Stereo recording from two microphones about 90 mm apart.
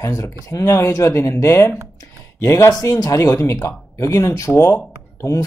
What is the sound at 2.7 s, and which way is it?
Speech, 45° left (ahead or behind).